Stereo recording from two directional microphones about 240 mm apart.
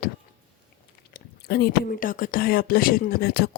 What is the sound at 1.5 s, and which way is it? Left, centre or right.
Speech, left.